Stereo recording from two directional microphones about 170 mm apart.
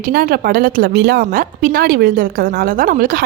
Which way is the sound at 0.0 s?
60° right (ahead or behind).